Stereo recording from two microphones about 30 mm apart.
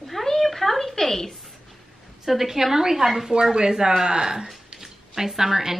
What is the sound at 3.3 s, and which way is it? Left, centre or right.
Speech, right.